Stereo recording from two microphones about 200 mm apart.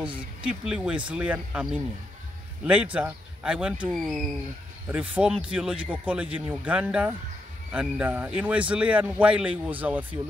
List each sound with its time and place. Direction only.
0.5 s a man's voice: 5° right (ahead or behind)